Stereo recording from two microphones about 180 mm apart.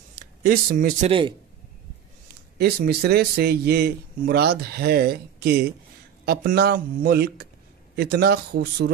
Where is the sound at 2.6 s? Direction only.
60° right (ahead or behind).